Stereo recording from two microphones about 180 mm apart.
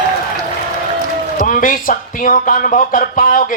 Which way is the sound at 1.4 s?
50° left (ahead or behind).